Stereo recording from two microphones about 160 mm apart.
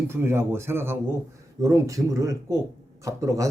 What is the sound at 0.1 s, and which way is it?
Speech, 15° right (ahead or behind).